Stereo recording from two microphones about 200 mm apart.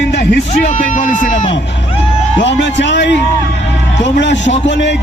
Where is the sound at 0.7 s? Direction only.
40° left (ahead or behind).